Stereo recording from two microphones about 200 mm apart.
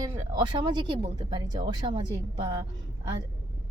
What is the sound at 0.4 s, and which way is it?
A woman's voice, 20° right (ahead or behind).